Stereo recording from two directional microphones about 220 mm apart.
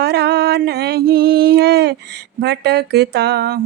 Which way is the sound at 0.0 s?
50° right (ahead or behind).